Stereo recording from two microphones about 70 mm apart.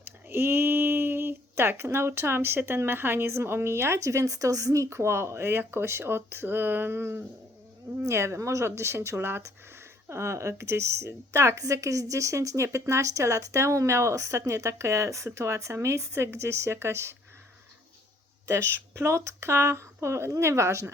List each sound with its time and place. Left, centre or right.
0.0 s a woman's voice: right
18.4 s speech: right